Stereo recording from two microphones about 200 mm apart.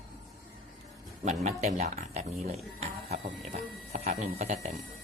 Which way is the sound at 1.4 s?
35° right (ahead or behind).